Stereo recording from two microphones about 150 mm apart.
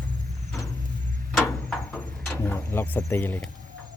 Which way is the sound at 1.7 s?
5° left (ahead or behind).